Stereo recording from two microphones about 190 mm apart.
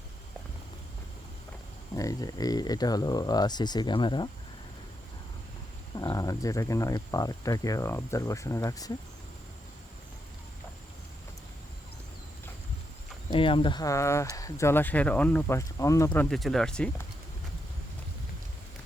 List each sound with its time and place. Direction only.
2.0 s speech: 20° left (ahead or behind)
5.9 s speech: 20° left (ahead or behind)
13.3 s speech: 25° left (ahead or behind)
16.0 s speech: 5° left (ahead or behind)